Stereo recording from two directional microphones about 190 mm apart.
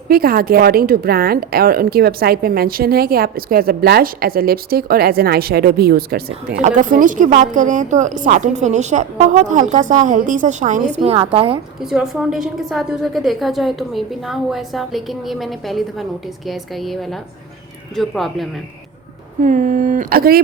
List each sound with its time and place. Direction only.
0.1 s a woman's voice: 50° right (ahead or behind); by 11.6 s 30° right (ahead or behind)
11.8 s a woman's voice: centre (ahead or behind)
19.4 s a woman's voice: 40° right (ahead or behind)